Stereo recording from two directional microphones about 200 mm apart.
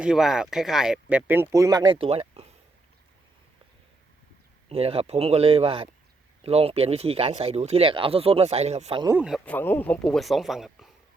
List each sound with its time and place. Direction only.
0.0 s speech: 5° right (ahead or behind); by 2.5 s 30° right (ahead or behind)
4.7 s speech: 30° right (ahead or behind)
9.0 s speech: 5° right (ahead or behind)